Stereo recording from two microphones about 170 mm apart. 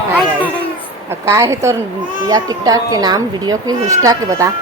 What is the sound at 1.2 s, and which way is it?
A woman's voice, 15° right (ahead or behind).